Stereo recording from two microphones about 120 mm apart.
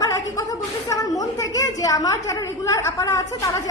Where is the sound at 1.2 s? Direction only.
30° left (ahead or behind).